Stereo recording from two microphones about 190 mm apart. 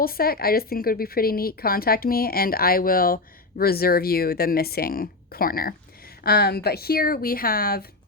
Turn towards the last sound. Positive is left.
turn(degrees=55)  # may be behind; listen again after turning